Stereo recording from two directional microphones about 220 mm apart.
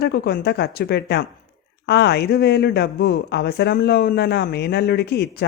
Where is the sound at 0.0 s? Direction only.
50° left (ahead or behind).